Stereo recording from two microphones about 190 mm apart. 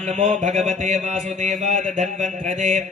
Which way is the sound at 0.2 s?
40° right (ahead or behind).